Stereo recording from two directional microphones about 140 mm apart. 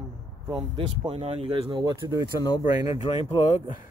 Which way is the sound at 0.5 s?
40° right (ahead or behind).